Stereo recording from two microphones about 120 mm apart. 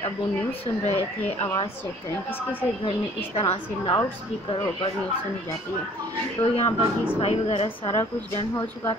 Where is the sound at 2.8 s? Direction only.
55° left (ahead or behind).